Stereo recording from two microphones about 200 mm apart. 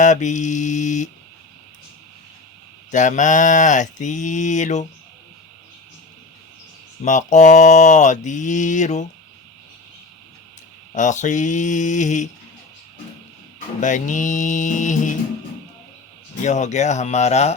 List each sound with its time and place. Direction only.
0.0 s mantra: 35° left (ahead or behind)
2.9 s mantra: 40° left (ahead or behind)
7.0 s mantra: 40° left (ahead or behind)
10.9 s mantra: 35° left (ahead or behind)
13.8 s mantra: 40° left (ahead or behind)
16.4 s mantra: 35° left (ahead or behind)